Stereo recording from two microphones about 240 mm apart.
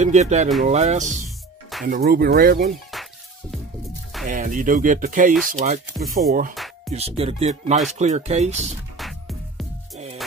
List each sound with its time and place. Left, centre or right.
0.0 s speech: right
2.7 s music: centre
4.3 s speech: right